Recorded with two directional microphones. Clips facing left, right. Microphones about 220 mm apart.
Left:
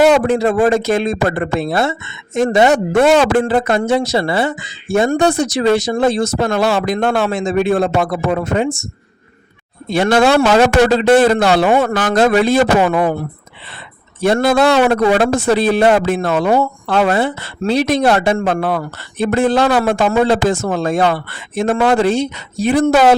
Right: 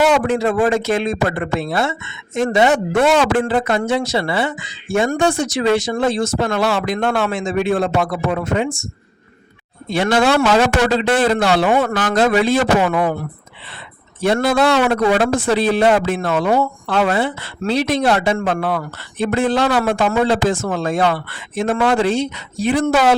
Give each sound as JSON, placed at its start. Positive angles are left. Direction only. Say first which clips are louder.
{"t": 0.0, "sound": "speech", "louder": "left 4 dB", "side_deg": 40}
{"t": 9.9, "sound": "a man's voice", "louder": "left 3 dB", "side_deg": 45}
{"t": 14.3, "sound": "a man's voice", "louder": "left 3 dB", "side_deg": 40}